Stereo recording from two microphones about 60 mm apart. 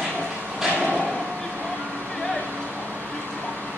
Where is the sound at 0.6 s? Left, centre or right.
Centre.